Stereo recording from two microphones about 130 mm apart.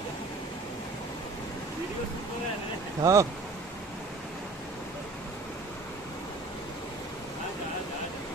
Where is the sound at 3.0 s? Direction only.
25° right (ahead or behind).